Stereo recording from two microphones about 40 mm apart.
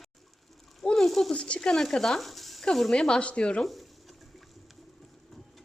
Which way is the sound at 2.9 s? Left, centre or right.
Left.